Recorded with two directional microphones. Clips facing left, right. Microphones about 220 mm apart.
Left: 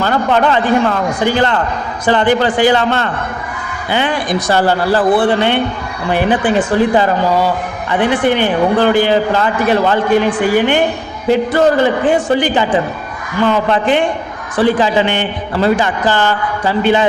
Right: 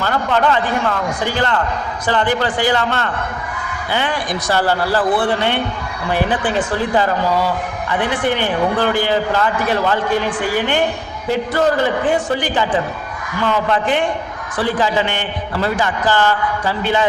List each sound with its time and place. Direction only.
0.0 s a man's voice: 20° left (ahead or behind)
12.3 s a man's voice: 25° left (ahead or behind)